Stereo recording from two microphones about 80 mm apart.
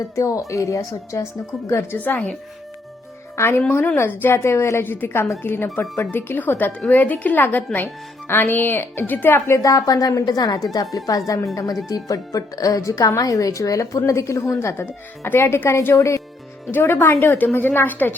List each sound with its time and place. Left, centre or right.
0.2 s speech: left
2.0 s a woman's voice: left
3.3 s a woman's voice: left
9.6 s speech: left
16.7 s a woman's voice: left